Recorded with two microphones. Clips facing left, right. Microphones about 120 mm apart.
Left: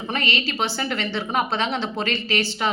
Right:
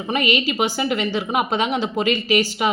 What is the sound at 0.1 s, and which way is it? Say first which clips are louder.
A woman's voice: right 6 dB; 15° right (ahead or behind).